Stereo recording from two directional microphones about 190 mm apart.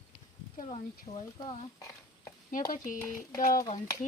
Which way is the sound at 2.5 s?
45° left (ahead or behind).